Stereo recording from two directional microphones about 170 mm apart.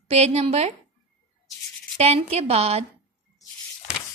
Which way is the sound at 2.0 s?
40° right (ahead or behind).